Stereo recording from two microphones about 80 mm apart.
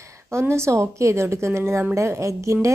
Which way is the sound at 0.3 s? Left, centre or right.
Right.